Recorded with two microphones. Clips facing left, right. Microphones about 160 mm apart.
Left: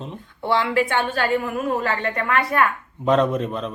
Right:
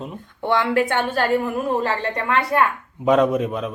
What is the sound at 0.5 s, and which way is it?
Speech, 45° right (ahead or behind).